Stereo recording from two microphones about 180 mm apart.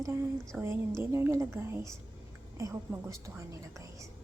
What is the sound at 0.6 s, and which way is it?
A woman's voice, 15° right (ahead or behind).